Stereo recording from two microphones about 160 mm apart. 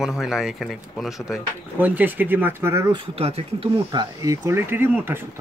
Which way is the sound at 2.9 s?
40° right (ahead or behind).